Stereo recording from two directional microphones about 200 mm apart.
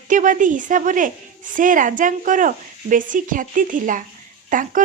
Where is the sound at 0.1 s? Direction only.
40° right (ahead or behind).